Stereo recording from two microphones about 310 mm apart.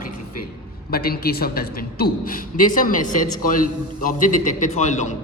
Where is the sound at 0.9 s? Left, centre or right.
Left.